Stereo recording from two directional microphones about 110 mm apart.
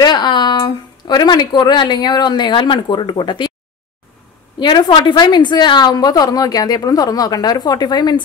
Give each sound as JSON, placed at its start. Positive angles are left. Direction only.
{"t": 0.0, "sound": "speech", "side_deg": 40}
{"t": 4.6, "sound": "a woman's voice", "side_deg": 45}